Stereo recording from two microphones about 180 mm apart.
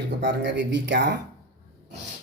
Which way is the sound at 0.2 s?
75° right (ahead or behind).